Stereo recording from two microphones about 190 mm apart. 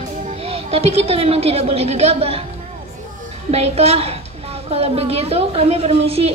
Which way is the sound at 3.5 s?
30° right (ahead or behind).